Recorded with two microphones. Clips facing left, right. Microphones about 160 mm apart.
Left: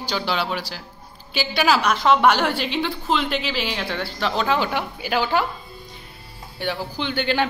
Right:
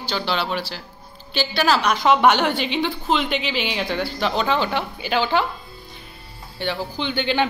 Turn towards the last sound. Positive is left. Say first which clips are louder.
# right 1 dB
turn(degrees=0)  # may be behind; listen again after turning